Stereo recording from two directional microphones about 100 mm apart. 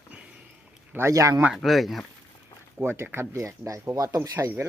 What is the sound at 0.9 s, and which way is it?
Speech, 25° right (ahead or behind).